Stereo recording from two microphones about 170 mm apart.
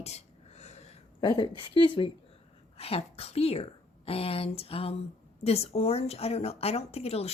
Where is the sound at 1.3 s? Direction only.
30° left (ahead or behind).